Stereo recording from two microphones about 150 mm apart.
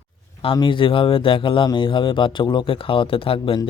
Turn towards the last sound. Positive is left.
turn(degrees=35)  # may be behind; listen again after turning